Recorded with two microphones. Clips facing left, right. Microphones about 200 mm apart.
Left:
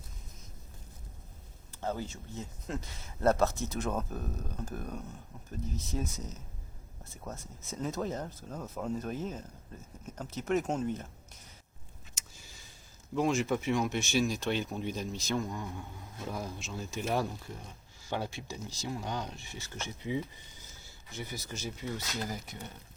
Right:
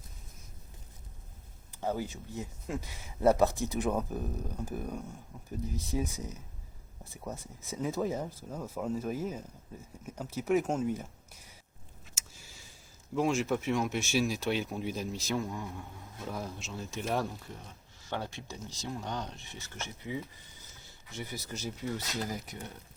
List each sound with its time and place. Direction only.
1.7 s speech: 10° right (ahead or behind)
13.1 s speech: centre (ahead or behind)
21.2 s speech: centre (ahead or behind)